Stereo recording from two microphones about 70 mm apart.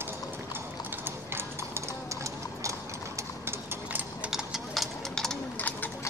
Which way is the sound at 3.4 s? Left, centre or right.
Right.